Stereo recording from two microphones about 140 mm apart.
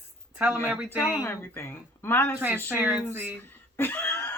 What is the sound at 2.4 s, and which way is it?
Speech, 15° right (ahead or behind).